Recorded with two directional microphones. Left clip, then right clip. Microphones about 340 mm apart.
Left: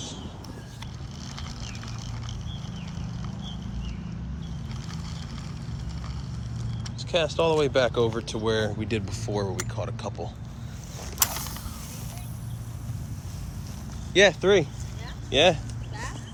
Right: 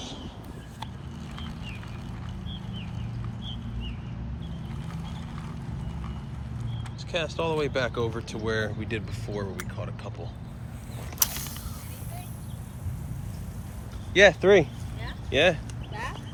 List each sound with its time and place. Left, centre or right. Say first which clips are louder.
7.1 s speech: left 5 dB; centre
11.2 s creak: left 2 dB; centre
14.1 s speech: right 2 dB; centre